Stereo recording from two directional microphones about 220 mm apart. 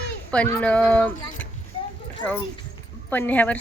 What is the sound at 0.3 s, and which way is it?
Speech, 5° left (ahead or behind).